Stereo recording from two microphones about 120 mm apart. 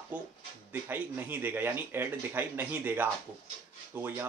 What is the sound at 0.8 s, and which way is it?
Speech, 15° right (ahead or behind).